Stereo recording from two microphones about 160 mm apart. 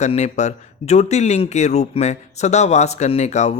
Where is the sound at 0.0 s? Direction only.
45° left (ahead or behind).